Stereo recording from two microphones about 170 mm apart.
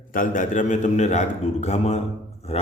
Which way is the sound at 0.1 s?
50° left (ahead or behind).